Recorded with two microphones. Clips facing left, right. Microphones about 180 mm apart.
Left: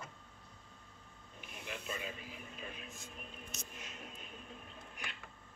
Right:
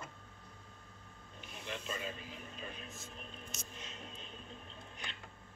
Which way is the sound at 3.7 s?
30° right (ahead or behind).